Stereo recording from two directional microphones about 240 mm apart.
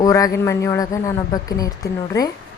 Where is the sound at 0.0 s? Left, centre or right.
Centre.